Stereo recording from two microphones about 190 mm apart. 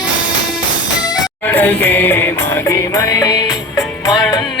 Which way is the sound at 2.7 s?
15° left (ahead or behind).